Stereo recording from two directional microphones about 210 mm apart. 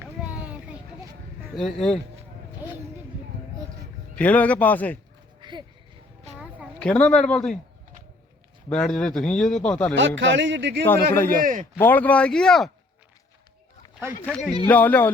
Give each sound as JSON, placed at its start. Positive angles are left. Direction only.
{"t": 0.0, "sound": "a sound", "side_deg": -5}
{"t": 1.5, "sound": "speech", "side_deg": 0}
{"t": 4.1, "sound": "speech", "side_deg": 5}
{"t": 5.4, "sound": "a sound", "side_deg": -20}
{"t": 6.7, "sound": "speech", "side_deg": 5}
{"t": 8.7, "sound": "speech", "side_deg": 5}
{"t": 10.2, "sound": "speech", "side_deg": -60}
{"t": 11.1, "sound": "speech", "side_deg": 10}
{"t": 14.2, "sound": "speech", "side_deg": 5}